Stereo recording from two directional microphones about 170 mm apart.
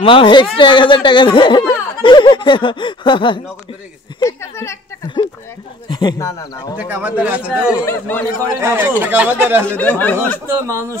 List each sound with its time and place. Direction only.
0.0 s speech: 30° left (ahead or behind)
4.2 s speech: 15° left (ahead or behind)
5.9 s speech: 25° left (ahead or behind)
6.8 s speech: 10° right (ahead or behind)
7.8 s speech: 10° left (ahead or behind)
8.5 s speech: 15° right (ahead or behind)
9.7 s speech: 10° left (ahead or behind)
10.4 s speech: 15° right (ahead or behind)